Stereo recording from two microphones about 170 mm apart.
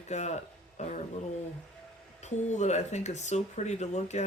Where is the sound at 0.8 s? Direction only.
45° left (ahead or behind).